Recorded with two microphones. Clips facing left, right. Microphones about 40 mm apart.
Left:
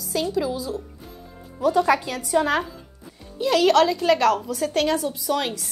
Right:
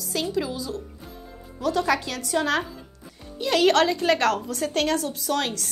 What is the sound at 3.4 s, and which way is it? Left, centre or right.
Speech, centre.